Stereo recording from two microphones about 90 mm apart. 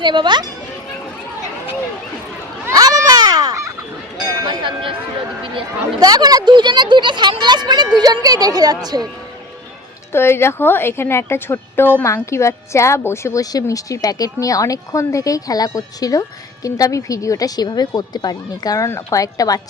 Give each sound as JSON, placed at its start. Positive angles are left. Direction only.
{"t": 0.0, "sound": "speech", "side_deg": -55}
{"t": 2.7, "sound": "a sound", "side_deg": -45}
{"t": 4.4, "sound": "speech", "side_deg": -60}
{"t": 6.0, "sound": "speech", "side_deg": -45}
{"t": 10.1, "sound": "speech", "side_deg": 25}
{"t": 13.4, "sound": "speech", "side_deg": 45}